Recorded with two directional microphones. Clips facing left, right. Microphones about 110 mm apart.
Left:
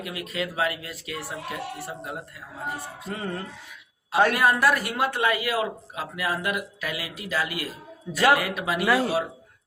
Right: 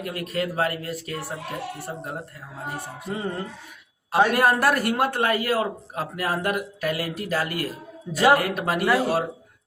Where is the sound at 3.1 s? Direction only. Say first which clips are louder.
Right 3 dB; 25° right (ahead or behind).